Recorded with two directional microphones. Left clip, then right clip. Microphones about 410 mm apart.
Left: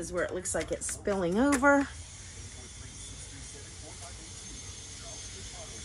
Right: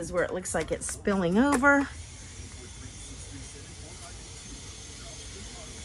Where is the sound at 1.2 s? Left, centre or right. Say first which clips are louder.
Right 2 dB; right.